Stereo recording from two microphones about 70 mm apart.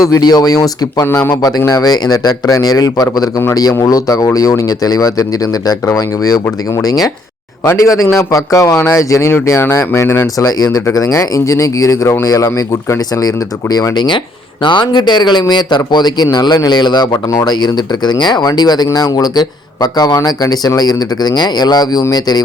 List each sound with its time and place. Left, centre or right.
0.0 s a man's voice: left
7.6 s a man's voice: left
9.5 s a man's voice: left
10.2 s a man's voice: left
13.9 s a man's voice: left